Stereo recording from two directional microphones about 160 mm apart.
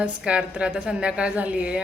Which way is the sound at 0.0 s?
5° right (ahead or behind).